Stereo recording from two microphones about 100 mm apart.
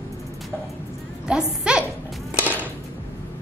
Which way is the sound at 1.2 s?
10° right (ahead or behind).